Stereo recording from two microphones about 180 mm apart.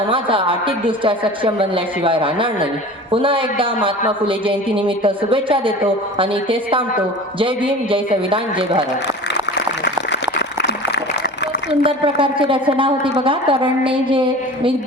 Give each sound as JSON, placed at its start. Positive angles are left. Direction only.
{"t": 0.1, "sound": "a woman's voice", "side_deg": -30}
{"t": 9.6, "sound": "a sound", "side_deg": 65}
{"t": 11.7, "sound": "a woman's voice", "side_deg": -30}